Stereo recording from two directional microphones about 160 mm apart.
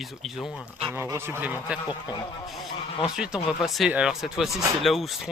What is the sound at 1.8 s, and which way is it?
Speech, 25° left (ahead or behind).